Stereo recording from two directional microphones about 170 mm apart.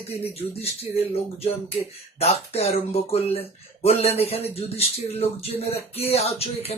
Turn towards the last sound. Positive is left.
turn(degrees=35)  # may be behind; listen again after turning